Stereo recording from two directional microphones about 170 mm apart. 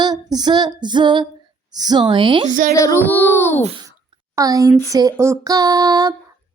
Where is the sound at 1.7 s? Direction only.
25° right (ahead or behind).